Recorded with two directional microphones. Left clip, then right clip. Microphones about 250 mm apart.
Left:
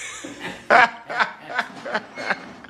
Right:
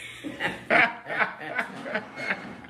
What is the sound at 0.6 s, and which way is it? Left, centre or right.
Snicker, centre.